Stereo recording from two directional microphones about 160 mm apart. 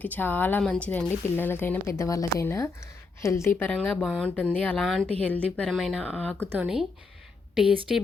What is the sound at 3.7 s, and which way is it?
Speech, centre (ahead or behind).